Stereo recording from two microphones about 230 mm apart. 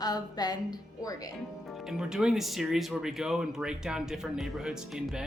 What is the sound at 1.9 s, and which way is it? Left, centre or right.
Speech, centre.